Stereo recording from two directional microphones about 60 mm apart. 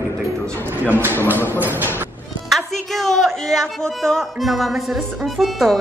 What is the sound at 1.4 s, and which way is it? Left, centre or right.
Speech, right.